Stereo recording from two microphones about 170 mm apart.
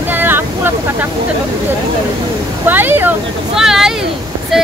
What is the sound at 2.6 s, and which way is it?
Speech, 10° right (ahead or behind).